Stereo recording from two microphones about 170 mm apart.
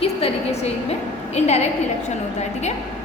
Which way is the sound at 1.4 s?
40° left (ahead or behind).